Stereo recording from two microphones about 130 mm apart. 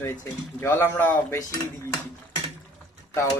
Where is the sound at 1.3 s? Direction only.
25° left (ahead or behind).